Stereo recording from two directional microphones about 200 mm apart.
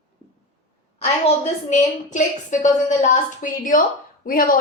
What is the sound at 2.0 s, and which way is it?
A woman's voice, 40° left (ahead or behind).